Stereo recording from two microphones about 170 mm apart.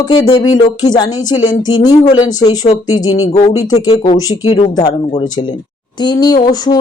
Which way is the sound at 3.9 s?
30° left (ahead or behind).